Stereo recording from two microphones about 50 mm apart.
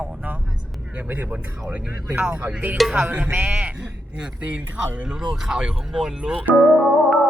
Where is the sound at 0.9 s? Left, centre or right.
Right.